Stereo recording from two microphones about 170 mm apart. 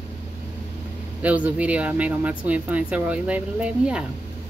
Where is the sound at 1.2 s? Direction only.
10° right (ahead or behind).